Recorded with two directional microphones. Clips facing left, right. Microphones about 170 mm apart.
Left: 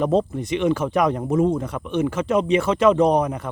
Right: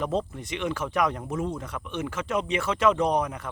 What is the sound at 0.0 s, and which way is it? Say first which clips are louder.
Speech: left 8 dB; 30° left (ahead or behind).